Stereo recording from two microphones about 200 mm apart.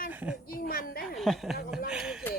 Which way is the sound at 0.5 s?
45° left (ahead or behind).